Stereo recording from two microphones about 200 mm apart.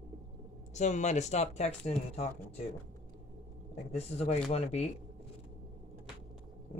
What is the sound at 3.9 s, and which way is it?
Speech, 30° left (ahead or behind).